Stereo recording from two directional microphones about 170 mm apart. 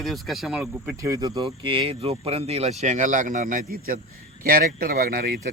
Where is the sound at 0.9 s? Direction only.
20° right (ahead or behind); by 5.5 s 65° right (ahead or behind).